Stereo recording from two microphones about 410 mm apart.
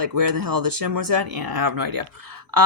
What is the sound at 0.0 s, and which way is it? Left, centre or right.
Speech, right.